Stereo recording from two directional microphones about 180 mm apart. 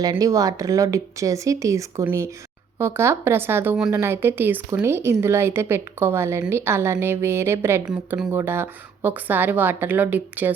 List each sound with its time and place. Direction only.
0.0 s a woman's voice: 20° right (ahead or behind)